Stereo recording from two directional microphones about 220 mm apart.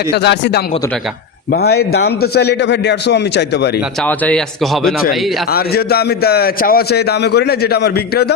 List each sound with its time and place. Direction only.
0.1 s a man's voice: 50° left (ahead or behind)
4.0 s speech: 5° left (ahead or behind)
5.0 s a man's voice: 45° left (ahead or behind)